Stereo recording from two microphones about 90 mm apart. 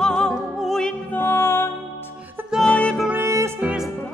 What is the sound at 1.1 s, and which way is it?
Music, 25° left (ahead or behind).